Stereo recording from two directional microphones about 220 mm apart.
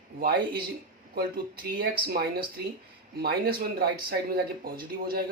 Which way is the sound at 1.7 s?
45° right (ahead or behind).